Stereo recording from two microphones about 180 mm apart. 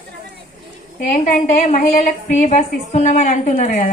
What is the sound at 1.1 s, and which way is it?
A woman's voice, 40° left (ahead or behind).